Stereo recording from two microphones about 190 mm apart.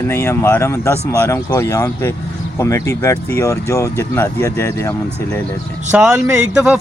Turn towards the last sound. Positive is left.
turn(degrees=-5)  # may be behind; listen again after turning